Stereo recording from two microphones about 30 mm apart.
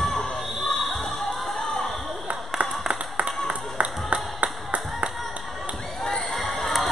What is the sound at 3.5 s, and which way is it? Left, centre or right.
Music, right.